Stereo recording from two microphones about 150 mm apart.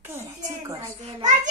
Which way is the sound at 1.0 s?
55° right (ahead or behind).